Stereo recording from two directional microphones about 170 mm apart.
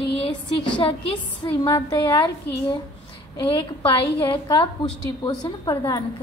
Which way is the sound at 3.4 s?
30° left (ahead or behind).